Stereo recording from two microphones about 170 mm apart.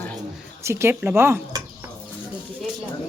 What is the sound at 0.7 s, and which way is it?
Speech, 15° right (ahead or behind).